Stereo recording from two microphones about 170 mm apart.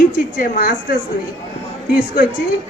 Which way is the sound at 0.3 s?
60° left (ahead or behind).